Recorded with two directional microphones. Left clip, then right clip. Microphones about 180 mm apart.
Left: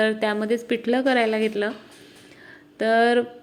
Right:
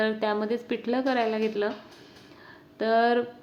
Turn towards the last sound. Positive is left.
turn(degrees=15)  # may be behind; listen again after turning